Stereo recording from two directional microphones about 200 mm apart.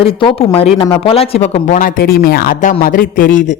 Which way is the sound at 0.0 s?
25° left (ahead or behind).